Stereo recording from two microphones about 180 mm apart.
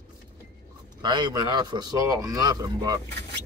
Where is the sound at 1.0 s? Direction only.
25° right (ahead or behind).